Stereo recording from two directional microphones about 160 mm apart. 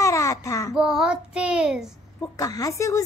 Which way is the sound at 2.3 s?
20° left (ahead or behind).